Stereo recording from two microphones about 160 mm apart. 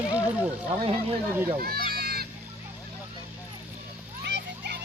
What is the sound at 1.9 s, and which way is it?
Music, 75° right (ahead or behind).